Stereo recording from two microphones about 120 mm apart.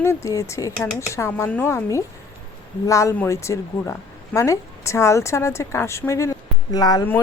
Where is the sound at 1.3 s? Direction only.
15° left (ahead or behind); by 7.0 s 35° left (ahead or behind).